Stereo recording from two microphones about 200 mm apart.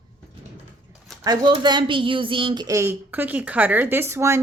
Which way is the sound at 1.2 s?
20° right (ahead or behind).